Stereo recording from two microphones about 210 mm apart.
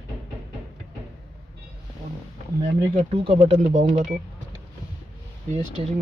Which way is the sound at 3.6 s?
35° right (ahead or behind).